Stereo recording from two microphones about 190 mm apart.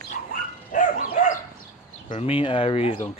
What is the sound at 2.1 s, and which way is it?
Speech, 30° left (ahead or behind).